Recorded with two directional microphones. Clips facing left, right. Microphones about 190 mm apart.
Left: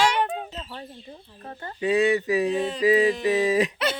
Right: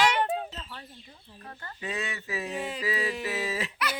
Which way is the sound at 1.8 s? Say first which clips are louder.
Left 15 dB; 15° left (ahead or behind).